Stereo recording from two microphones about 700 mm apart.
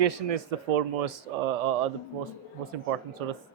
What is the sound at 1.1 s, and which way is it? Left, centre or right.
Speech, right.